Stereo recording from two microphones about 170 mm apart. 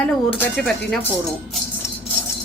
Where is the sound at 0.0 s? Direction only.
10° left (ahead or behind).